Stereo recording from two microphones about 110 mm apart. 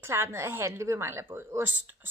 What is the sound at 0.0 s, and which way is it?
A woman's voice, 25° right (ahead or behind).